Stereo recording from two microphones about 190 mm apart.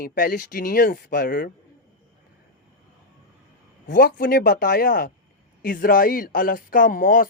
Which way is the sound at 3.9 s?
50° left (ahead or behind).